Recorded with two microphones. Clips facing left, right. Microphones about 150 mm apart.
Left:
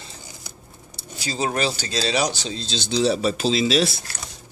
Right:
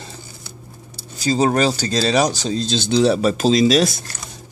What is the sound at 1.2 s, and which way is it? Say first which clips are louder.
Speech: right 7 dB; 40° right (ahead or behind).